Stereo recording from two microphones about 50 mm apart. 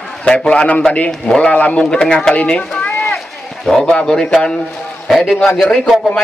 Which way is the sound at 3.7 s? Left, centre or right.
Centre.